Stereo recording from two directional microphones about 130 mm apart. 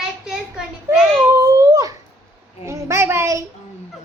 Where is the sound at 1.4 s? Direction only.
25° right (ahead or behind).